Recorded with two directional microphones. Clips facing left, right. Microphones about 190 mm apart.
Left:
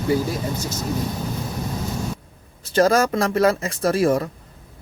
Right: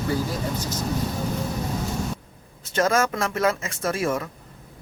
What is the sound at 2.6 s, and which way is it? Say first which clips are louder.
Speech: left 5 dB; 35° left (ahead or behind).